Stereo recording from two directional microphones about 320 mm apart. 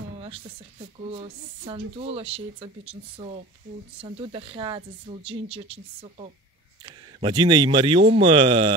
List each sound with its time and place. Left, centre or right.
1.1 s a woman's voice: centre